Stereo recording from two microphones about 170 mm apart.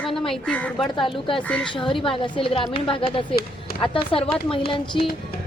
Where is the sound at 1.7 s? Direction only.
30° left (ahead or behind).